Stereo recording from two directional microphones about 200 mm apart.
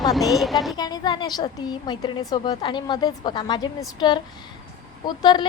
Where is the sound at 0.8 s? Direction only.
20° left (ahead or behind).